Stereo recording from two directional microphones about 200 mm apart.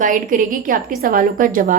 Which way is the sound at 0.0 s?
40° right (ahead or behind).